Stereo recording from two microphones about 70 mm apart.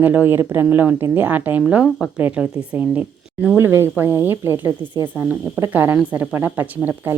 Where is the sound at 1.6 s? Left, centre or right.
Centre.